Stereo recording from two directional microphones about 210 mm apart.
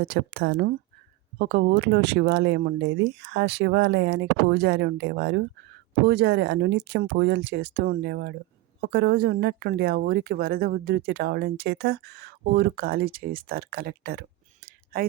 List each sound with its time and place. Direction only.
0.0 s speech: 55° right (ahead or behind)